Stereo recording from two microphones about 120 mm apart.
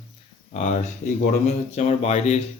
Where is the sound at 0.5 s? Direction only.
75° left (ahead or behind).